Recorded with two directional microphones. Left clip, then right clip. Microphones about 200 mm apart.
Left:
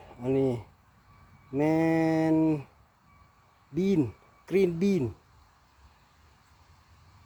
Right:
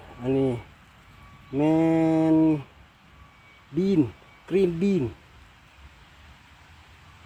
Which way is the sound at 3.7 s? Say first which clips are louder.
Right 4 dB; 10° left (ahead or behind).